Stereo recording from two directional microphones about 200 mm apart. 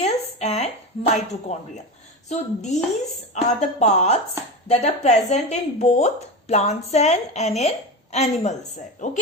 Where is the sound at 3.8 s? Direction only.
35° left (ahead or behind).